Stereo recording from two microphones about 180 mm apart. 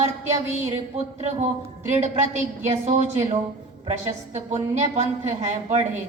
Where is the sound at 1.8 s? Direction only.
40° right (ahead or behind).